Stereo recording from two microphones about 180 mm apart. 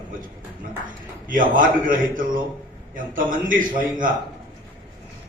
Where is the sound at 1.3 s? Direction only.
50° right (ahead or behind).